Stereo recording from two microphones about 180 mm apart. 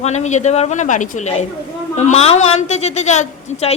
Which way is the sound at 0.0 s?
40° left (ahead or behind).